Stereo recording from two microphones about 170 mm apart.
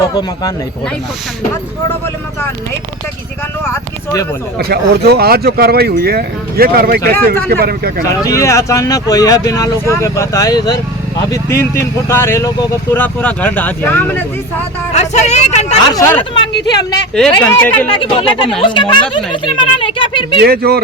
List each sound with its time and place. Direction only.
4.5 s speech: 70° right (ahead or behind)
8.2 s speech: 20° left (ahead or behind)
14.9 s speech: 40° left (ahead or behind)
15.9 s speech: 15° left (ahead or behind)
17.4 s speech: 10° left (ahead or behind)
17.9 s speech: 30° left (ahead or behind)
20.4 s speech: 65° right (ahead or behind)